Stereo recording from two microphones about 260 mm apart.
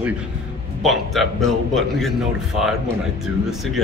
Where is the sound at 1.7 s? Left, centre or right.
Centre.